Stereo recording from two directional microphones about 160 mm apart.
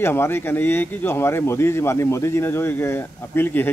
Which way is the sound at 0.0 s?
15° left (ahead or behind).